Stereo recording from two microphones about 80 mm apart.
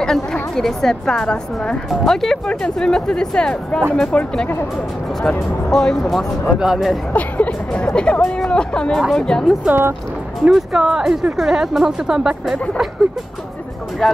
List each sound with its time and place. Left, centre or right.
0.0 s speech: centre
5.7 s speech: centre
7.2 s speech: centre
9.7 s speech: right
10.5 s speech: centre
14.0 s speech: centre